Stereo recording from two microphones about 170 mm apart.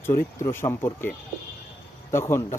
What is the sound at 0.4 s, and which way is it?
Speech, 15° left (ahead or behind).